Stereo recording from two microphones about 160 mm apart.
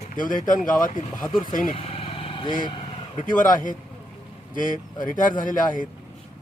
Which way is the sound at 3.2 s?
55° left (ahead or behind).